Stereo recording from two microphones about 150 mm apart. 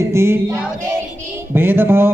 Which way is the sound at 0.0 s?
15° right (ahead or behind).